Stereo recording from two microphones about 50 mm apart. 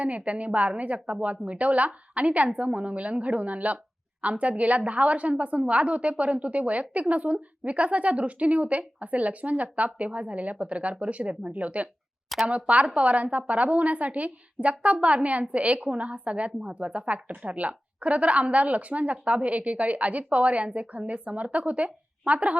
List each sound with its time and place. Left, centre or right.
0.0 s a woman's voice: right